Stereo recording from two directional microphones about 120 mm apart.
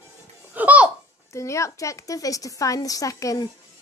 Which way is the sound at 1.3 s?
25° left (ahead or behind).